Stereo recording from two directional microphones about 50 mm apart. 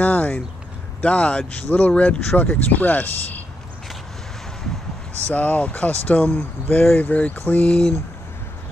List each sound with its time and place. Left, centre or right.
0.0 s a sound: left
1.0 s speech: left
5.2 s speech: left
6.8 s speech: left